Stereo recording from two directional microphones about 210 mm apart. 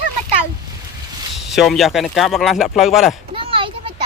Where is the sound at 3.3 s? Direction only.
25° right (ahead or behind).